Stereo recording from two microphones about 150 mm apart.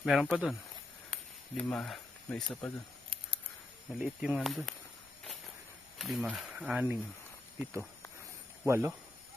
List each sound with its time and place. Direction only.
0.0 s speech: centre (ahead or behind)
3.1 s a sound: 40° right (ahead or behind)
3.9 s speech: 5° right (ahead or behind)
6.0 s speech: centre (ahead or behind)
8.6 s speech: 20° right (ahead or behind)